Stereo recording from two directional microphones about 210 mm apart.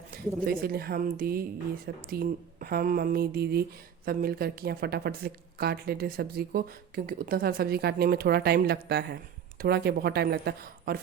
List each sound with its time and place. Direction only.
0.4 s speech: 45° right (ahead or behind)